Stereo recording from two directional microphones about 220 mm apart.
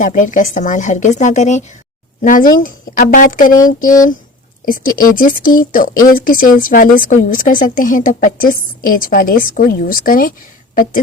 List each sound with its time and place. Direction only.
0.0 s speech: 35° left (ahead or behind)
4.6 s speech: 40° left (ahead or behind)